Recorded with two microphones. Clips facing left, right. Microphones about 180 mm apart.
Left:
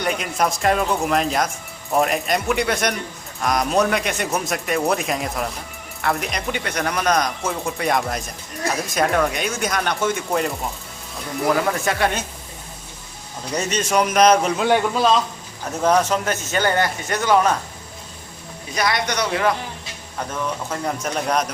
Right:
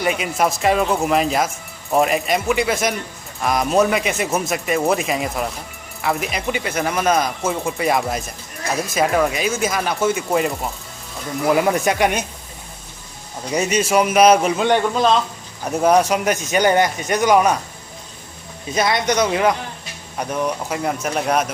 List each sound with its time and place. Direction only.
0.0 s speech: 5° right (ahead or behind)
11.5 s speech: 15° right (ahead or behind)
13.5 s speech: 10° right (ahead or behind)
15.8 s speech: 10° right (ahead or behind)
18.7 s a man's voice: 20° right (ahead or behind); by 21.4 s 5° right (ahead or behind)